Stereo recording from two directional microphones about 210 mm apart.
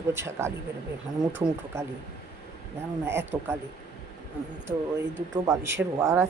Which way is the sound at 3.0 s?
10° right (ahead or behind).